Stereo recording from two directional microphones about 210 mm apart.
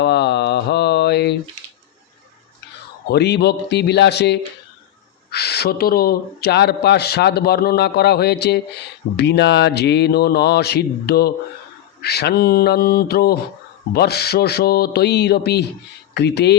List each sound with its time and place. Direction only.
0.0 s mantra: 55° left (ahead or behind)
3.1 s speech: 55° left (ahead or behind)